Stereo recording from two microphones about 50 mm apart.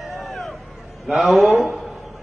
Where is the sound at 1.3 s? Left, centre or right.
Centre.